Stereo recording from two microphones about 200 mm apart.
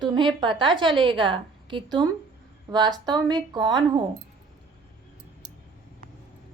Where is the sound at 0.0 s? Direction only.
20° right (ahead or behind).